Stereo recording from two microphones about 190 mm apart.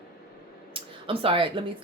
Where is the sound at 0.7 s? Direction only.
30° right (ahead or behind).